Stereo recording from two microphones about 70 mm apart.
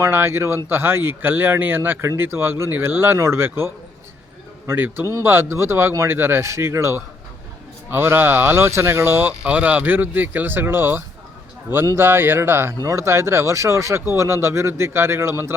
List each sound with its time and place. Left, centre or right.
0.0 s speech: right
9.4 s speech: centre; by 15.5 s right